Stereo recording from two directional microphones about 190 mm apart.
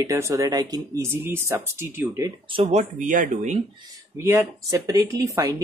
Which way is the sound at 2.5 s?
35° right (ahead or behind).